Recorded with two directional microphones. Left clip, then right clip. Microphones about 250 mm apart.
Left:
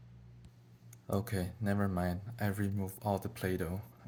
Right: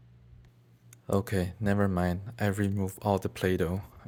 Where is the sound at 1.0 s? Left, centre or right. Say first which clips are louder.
Right 8 dB; right.